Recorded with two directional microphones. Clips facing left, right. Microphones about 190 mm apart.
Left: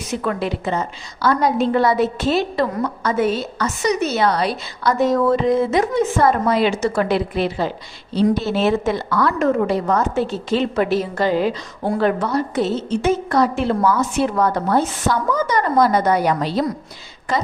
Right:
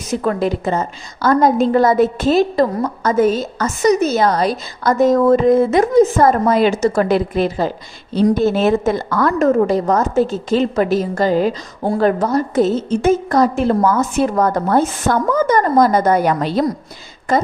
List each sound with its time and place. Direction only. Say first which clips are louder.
0.1 s a woman's voice: right 5 dB; 40° right (ahead or behind)